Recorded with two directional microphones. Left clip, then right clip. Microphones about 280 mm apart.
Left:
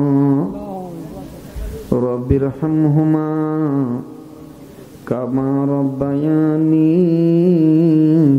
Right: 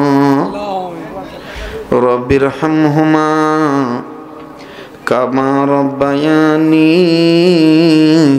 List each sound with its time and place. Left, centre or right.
0.0 s a sound: centre
2.0 s mantra: centre
5.0 s mantra: centre